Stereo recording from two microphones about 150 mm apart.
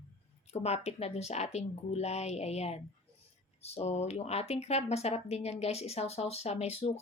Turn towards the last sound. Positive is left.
turn(degrees=45)  # may be behind; listen again after turning